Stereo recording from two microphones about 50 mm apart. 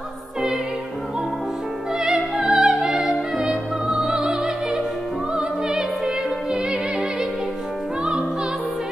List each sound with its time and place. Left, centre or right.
2.0 s music: centre
3.4 s music: centre
5.7 s opera: centre
6.5 s music: right